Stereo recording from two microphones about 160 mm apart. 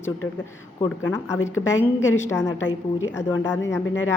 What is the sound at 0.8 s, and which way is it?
A woman's voice, 15° left (ahead or behind).